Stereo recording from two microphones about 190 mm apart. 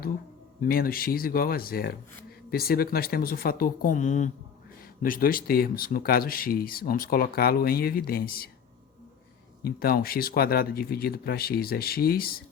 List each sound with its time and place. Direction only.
0.6 s speech: 50° left (ahead or behind)
9.6 s speech: 50° left (ahead or behind)